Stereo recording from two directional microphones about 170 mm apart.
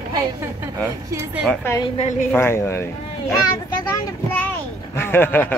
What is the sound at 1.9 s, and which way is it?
Speech, 45° left (ahead or behind).